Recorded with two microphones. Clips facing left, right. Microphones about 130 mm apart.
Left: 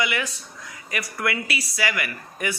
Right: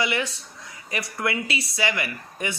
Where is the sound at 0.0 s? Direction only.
30° right (ahead or behind).